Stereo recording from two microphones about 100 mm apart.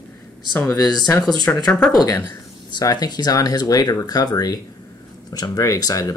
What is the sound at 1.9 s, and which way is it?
Speech, 40° left (ahead or behind).